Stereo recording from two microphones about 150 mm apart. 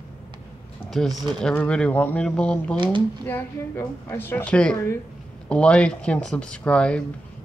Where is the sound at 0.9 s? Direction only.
Centre (ahead or behind).